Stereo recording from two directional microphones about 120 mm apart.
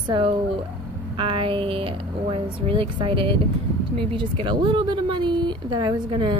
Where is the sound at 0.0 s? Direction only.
45° right (ahead or behind).